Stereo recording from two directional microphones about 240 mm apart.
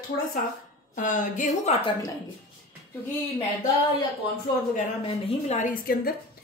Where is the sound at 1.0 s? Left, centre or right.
Left.